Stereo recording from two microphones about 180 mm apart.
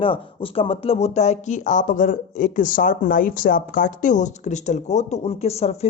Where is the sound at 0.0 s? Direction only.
30° left (ahead or behind).